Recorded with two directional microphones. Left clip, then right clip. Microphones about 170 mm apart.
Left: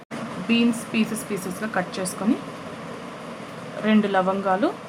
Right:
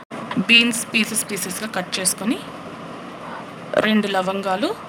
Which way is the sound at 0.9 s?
80° right.